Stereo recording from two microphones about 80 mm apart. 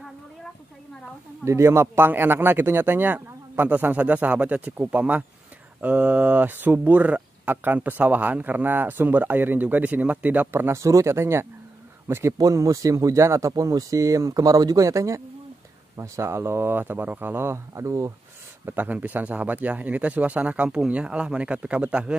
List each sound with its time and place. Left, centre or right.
1.4 s speech: right; by 10.5 s centre
10.5 s speech: right
12.4 s speech: right
14.9 s speech: right
18.7 s speech: right